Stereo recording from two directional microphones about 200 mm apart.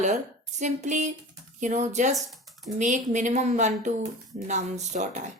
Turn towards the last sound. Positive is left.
turn(degrees=-35)  # may be behind; listen again after turning